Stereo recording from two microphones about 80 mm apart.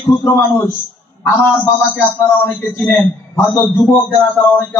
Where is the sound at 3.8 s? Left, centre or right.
Left.